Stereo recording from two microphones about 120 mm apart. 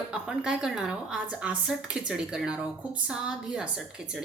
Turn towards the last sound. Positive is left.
turn(degrees=-5)  # may be behind; listen again after turning